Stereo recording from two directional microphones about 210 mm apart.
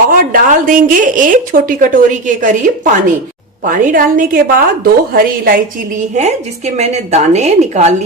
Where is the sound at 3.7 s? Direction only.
40° right (ahead or behind).